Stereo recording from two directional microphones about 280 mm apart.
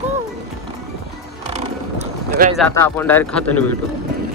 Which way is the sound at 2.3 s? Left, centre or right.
Right.